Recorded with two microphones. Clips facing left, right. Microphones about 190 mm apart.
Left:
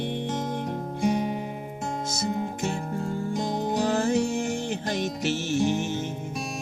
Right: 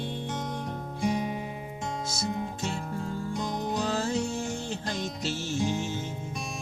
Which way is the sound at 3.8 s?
55° left (ahead or behind).